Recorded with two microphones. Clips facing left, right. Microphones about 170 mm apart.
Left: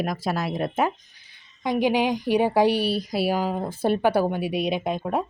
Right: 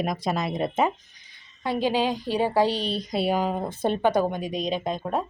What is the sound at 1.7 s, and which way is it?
Speech, 15° left (ahead or behind).